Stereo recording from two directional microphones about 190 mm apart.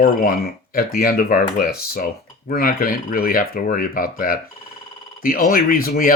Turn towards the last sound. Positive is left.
turn(degrees=50)  # may be behind; listen again after turning